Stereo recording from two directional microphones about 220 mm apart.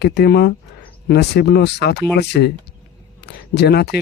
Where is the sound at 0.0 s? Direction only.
50° left (ahead or behind).